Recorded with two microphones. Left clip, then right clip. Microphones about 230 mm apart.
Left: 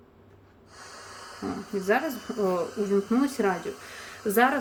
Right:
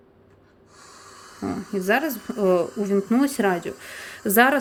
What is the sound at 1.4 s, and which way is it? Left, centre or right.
A woman's voice, right.